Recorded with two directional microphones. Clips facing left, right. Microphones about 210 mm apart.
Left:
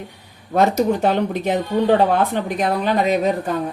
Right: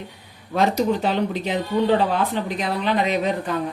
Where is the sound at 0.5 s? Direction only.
50° left (ahead or behind).